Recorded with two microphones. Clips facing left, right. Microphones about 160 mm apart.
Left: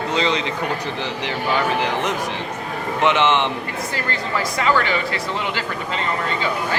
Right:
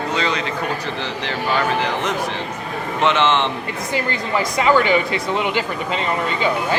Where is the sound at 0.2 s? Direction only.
20° left (ahead or behind).